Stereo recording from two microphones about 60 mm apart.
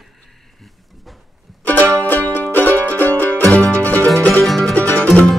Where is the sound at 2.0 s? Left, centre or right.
Left.